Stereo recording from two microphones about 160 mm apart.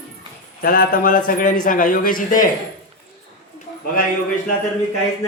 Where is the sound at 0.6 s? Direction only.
65° left (ahead or behind).